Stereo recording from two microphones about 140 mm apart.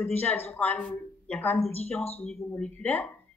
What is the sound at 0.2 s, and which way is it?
A woman's voice, 15° left (ahead or behind).